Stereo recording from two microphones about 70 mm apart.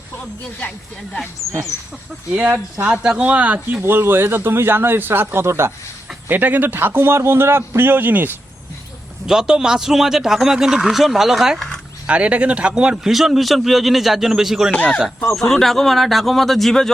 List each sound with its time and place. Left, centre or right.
2.3 s speech: right
2.8 s speech: centre; by 5.7 s right
6.2 s speech: right
9.2 s a man's voice: centre
12.0 s a man's voice: centre
14.7 s speech: centre
15.4 s a man's voice: centre